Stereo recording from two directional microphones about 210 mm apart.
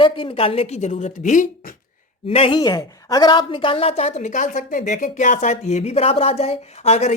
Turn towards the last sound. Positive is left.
turn(degrees=30)  # may be behind; listen again after turning